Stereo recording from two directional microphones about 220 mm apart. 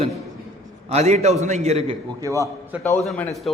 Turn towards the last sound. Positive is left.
turn(degrees=5)  # may be behind; listen again after turning